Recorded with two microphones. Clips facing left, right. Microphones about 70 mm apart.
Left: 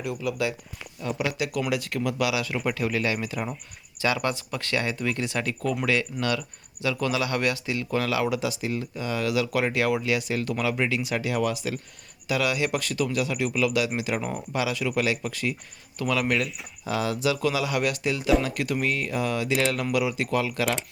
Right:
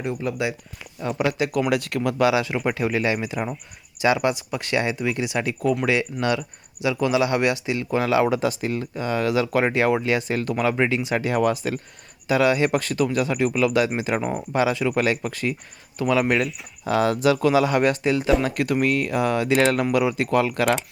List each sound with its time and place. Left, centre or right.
0.0 s speech: right
1.7 s speech: right
2.1 s speech: right
16.8 s speech: right